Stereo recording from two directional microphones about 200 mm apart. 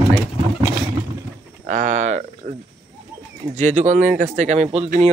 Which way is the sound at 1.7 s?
40° right (ahead or behind).